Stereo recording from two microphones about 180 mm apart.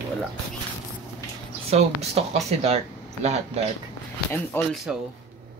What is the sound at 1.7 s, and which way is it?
Speech, 35° right (ahead or behind).